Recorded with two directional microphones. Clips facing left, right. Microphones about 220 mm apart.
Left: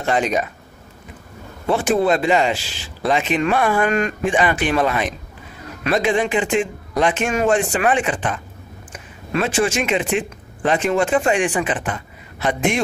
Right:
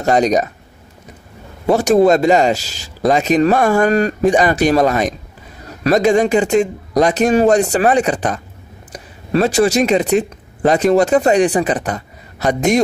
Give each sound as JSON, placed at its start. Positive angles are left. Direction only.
{"t": 0.0, "sound": "speech", "side_deg": -40}
{"t": 1.7, "sound": "speech", "side_deg": -40}